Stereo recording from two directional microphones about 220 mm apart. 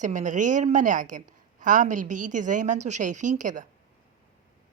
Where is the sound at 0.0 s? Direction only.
35° right (ahead or behind).